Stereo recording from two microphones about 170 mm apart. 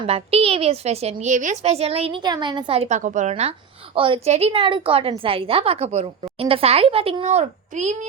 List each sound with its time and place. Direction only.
0.0 s a woman's voice: 35° right (ahead or behind)
1.1 s a woman's voice: 45° right (ahead or behind)